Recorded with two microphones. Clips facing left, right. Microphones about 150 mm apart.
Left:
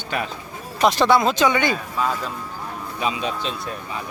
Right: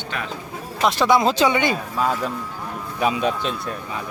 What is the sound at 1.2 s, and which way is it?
Speech, 25° right (ahead or behind).